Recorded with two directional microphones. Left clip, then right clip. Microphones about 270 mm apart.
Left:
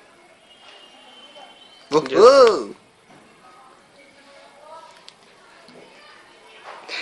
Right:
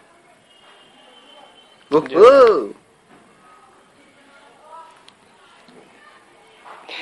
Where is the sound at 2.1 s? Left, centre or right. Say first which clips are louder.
Right 2 dB; centre.